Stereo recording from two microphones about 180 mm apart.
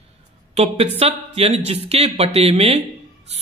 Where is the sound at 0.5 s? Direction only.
35° right (ahead or behind).